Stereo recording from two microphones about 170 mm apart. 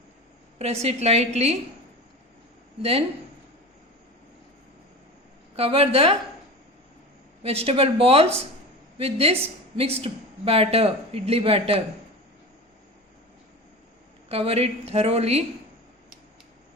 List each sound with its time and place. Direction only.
0.6 s a woman's voice: 40° right (ahead or behind)
5.5 s a woman's voice: 35° right (ahead or behind)
7.4 s a woman's voice: 35° right (ahead or behind)
14.3 s a woman's voice: 35° right (ahead or behind)